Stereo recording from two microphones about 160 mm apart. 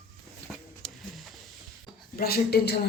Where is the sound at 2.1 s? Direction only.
70° left (ahead or behind); by 2.9 s 90° left.